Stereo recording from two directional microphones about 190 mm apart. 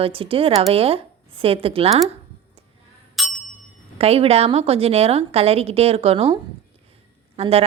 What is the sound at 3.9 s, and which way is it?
A woman's voice, 30° right (ahead or behind).